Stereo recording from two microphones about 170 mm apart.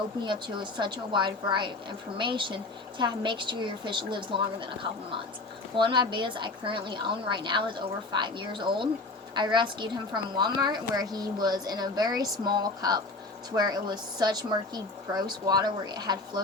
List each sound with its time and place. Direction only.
0.3 s a woman's voice: 25° right (ahead or behind)